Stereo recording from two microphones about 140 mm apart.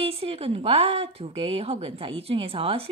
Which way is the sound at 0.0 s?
45° right (ahead or behind).